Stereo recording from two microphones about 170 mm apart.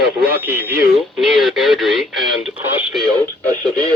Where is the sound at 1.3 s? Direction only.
Centre (ahead or behind).